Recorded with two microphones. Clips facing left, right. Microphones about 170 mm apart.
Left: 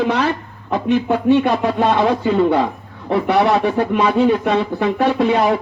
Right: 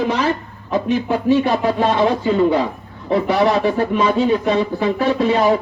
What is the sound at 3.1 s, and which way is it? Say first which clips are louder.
Speech: left 1 dB; 60° left (ahead or behind).